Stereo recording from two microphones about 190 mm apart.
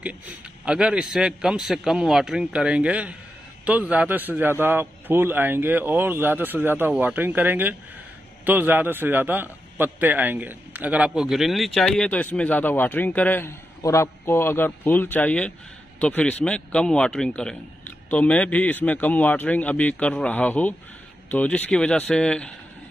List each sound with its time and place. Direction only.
0.7 s a man's voice: 5° right (ahead or behind)